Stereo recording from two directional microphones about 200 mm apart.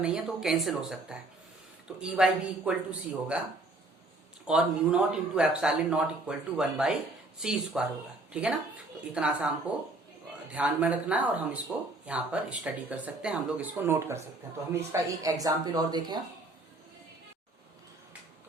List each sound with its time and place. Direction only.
0.0 s speech: 5° right (ahead or behind)
4.4 s speech: 5° right (ahead or behind)
10.5 s speech: 5° right (ahead or behind)